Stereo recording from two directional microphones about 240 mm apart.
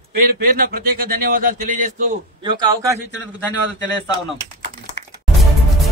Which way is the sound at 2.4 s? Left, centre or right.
Centre.